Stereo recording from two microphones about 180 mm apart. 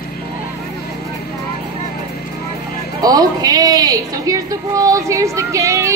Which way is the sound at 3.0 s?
20° right (ahead or behind).